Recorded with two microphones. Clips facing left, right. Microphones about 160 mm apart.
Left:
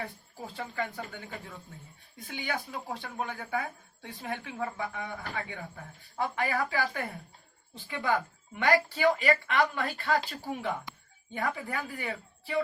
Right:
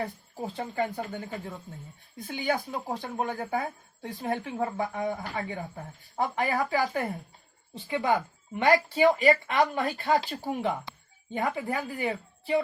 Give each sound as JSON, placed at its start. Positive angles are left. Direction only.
{"t": 0.3, "sound": "speech", "side_deg": -30}
{"t": 8.5, "sound": "a woman's voice", "side_deg": -25}